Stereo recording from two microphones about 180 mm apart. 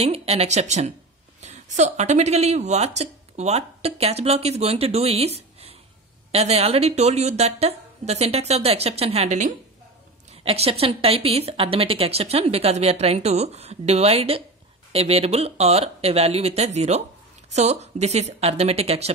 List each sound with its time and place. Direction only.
0.0 s a woman's voice: 35° right (ahead or behind)